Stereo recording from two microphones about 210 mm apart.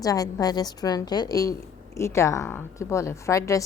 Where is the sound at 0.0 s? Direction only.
15° left (ahead or behind).